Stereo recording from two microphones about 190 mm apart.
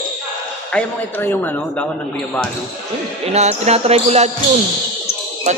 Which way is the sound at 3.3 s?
35° right (ahead or behind).